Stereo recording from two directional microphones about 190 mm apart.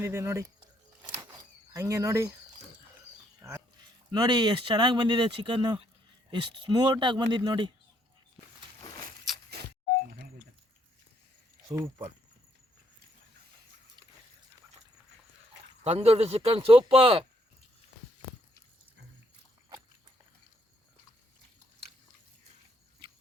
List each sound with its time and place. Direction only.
0.0 s speech: 15° right (ahead or behind)
1.7 s speech: 15° right (ahead or behind)
4.1 s speech: 20° right (ahead or behind)
11.7 s speech: 20° right (ahead or behind)
15.8 s speech: 35° right (ahead or behind)